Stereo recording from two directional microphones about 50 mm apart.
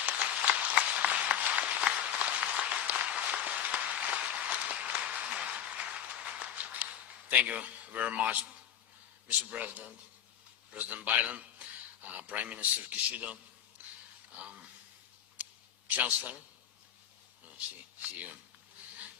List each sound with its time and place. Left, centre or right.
0.1 s applause: right
7.4 s a man's voice: right
15.4 s a sound: right
15.9 s a man's voice: right
18.0 s a man's voice: right